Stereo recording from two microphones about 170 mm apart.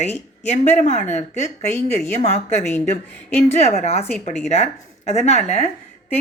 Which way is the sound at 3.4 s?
40° left (ahead or behind).